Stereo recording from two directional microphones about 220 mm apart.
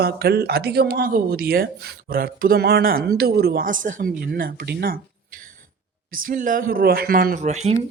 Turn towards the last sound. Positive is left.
turn(degrees=-30)  # may be behind; listen again after turning